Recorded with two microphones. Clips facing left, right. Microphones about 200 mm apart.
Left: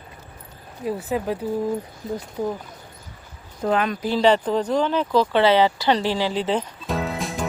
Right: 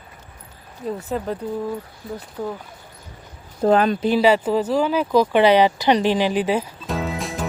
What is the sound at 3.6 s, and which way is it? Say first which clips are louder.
Speech: right 5 dB; 35° right (ahead or behind).